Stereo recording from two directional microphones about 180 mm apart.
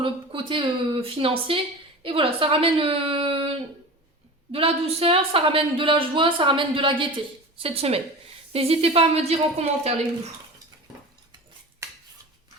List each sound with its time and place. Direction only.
0.0 s speech: 30° right (ahead or behind)
4.5 s a woman's voice: 35° right (ahead or behind)
11.8 s a sound: 15° right (ahead or behind)